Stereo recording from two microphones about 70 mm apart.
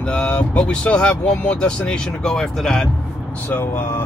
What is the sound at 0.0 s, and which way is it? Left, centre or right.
Speech, centre.